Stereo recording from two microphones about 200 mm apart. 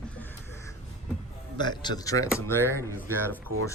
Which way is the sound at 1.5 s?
20° left (ahead or behind).